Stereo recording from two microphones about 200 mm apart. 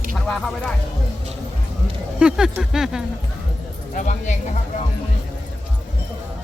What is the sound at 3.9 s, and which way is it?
Speech, 40° left (ahead or behind).